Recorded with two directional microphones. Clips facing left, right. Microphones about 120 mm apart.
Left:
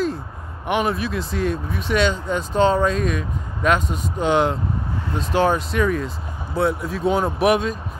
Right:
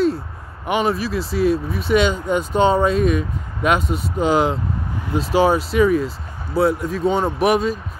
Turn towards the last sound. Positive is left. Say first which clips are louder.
# right 1 dB
turn(degrees=0)  # may be behind; listen again after turning